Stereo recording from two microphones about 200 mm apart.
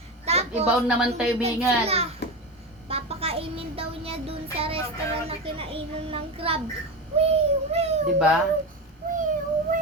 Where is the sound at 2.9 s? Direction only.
30° right (ahead or behind).